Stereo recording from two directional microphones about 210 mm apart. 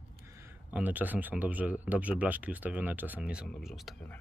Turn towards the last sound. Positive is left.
turn(degrees=0)  # may be behind; listen again after turning